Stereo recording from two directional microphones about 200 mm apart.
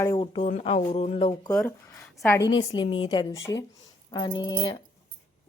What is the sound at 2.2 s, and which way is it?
Speech, 10° left (ahead or behind).